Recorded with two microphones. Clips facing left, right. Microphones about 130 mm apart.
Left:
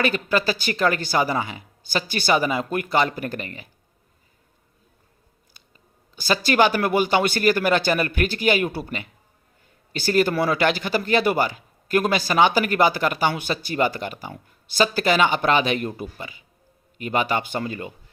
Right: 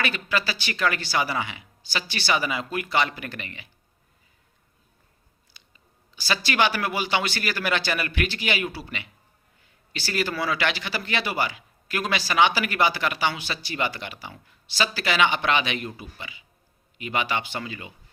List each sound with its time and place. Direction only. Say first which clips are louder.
0.0 s speech: left 5 dB; 45° left (ahead or behind)
6.1 s speech: left 5 dB; 45° left (ahead or behind)